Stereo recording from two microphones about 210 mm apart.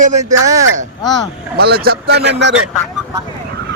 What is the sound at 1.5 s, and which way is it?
Speech, 50° right (ahead or behind).